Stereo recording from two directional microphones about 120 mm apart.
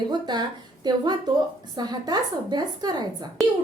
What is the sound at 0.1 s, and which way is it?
A woman's voice, 35° right (ahead or behind).